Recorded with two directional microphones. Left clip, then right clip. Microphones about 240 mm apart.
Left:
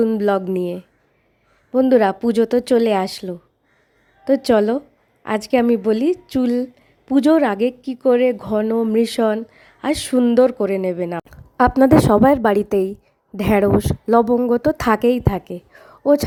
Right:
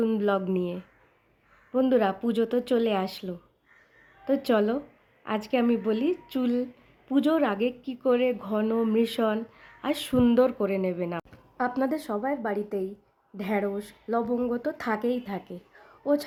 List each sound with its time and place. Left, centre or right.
0.0 s speech: left
11.5 s a woman's voice: left